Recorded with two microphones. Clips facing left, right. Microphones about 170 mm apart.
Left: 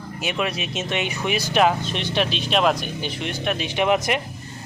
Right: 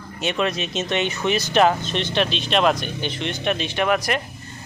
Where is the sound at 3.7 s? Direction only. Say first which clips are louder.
Left 3 dB; 20° left (ahead or behind).